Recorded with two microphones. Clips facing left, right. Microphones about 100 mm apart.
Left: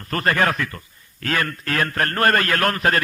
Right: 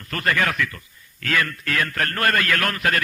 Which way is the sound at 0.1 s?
40° left (ahead or behind).